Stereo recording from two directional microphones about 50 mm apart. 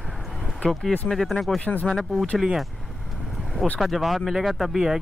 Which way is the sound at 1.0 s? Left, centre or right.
Centre.